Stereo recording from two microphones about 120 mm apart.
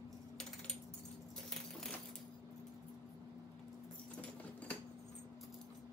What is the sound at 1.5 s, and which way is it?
Keys jangling, 5° left (ahead or behind).